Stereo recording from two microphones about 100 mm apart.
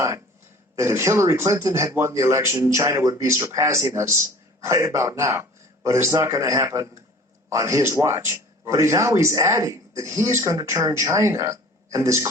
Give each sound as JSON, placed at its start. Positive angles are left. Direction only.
{"t": 0.8, "sound": "speech", "side_deg": -25}